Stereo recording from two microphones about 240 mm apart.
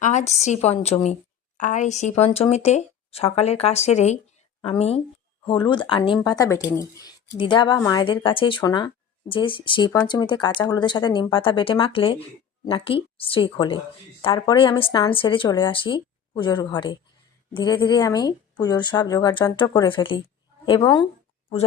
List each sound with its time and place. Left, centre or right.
0.0 s a woman's voice: left